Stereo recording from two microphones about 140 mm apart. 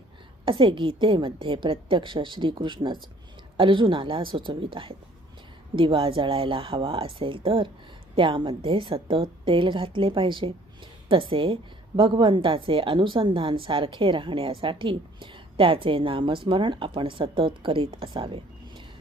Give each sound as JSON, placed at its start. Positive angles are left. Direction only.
{"t": 0.4, "sound": "a woman's voice", "side_deg": -35}